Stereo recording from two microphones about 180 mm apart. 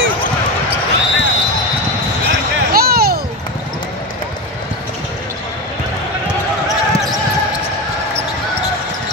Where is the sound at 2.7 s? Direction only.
60° right (ahead or behind).